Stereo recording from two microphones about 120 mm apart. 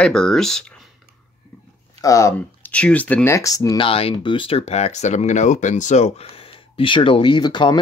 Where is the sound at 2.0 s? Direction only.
25° left (ahead or behind).